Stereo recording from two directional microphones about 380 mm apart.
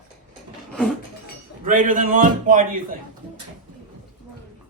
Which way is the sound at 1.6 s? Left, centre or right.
Right.